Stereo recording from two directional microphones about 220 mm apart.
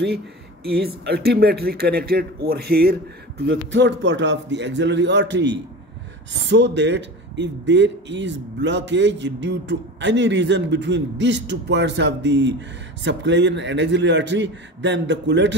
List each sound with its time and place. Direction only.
0.7 s a man's voice: 45° right (ahead or behind)